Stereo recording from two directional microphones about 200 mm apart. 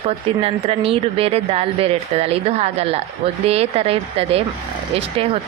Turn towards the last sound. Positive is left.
turn(degrees=-30)  # may be behind; listen again after turning